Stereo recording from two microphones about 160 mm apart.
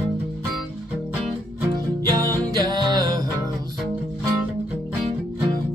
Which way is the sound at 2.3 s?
25° right (ahead or behind).